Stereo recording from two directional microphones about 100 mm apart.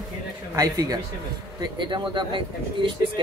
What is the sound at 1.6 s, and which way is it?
Speech, 50° right (ahead or behind).